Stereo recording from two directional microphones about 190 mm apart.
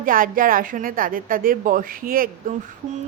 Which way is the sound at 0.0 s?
45° right (ahead or behind).